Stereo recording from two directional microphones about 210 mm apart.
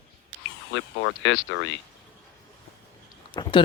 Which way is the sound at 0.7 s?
65° left (ahead or behind).